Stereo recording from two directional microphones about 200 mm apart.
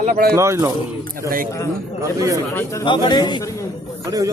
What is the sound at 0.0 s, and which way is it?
Speech, 45° right (ahead or behind).